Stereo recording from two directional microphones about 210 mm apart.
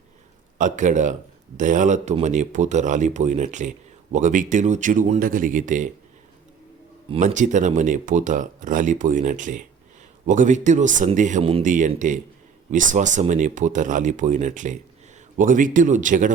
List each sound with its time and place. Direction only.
0.6 s speech: 35° right (ahead or behind)
7.3 s speech: 35° right (ahead or behind)